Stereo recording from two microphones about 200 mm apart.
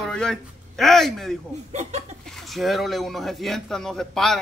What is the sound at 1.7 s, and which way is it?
Speech, 35° right (ahead or behind).